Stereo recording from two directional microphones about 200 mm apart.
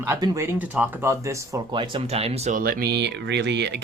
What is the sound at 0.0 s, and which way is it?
Speech, 15° right (ahead or behind).